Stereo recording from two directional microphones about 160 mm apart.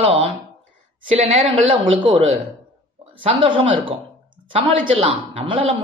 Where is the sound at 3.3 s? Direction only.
30° right (ahead or behind).